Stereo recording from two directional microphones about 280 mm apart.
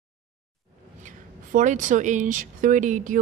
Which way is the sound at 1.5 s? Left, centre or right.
Right.